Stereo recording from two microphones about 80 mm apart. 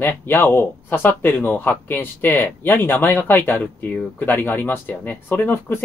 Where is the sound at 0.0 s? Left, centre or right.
Left.